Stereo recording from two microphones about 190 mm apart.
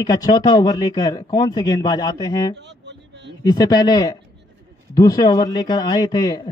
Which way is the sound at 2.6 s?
65° right (ahead or behind).